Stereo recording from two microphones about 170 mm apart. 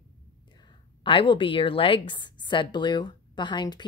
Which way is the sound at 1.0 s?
30° left (ahead or behind).